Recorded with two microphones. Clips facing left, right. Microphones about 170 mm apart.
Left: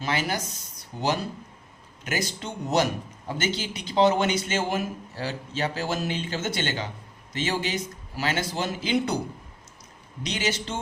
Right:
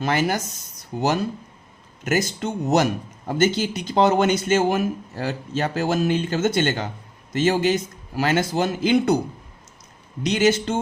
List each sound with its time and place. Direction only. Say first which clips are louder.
0.0 s a man's voice: right 6 dB; 50° right (ahead or behind)
2.0 s a man's voice: right 7 dB; 45° right (ahead or behind)
10.2 s a man's voice: right 10 dB; 50° right (ahead or behind)